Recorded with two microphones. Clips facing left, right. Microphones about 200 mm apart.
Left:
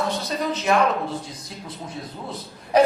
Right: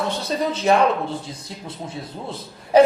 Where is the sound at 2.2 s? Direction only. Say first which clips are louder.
Right 2 dB; 30° right (ahead or behind).